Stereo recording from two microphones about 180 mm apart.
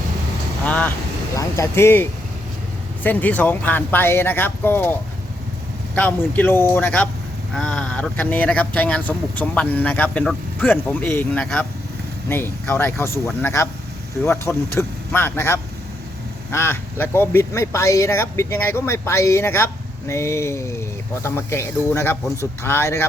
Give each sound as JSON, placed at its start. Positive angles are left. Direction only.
{"t": 0.6, "sound": "vehicle", "side_deg": 5}
{"t": 1.4, "sound": "speech", "side_deg": 15}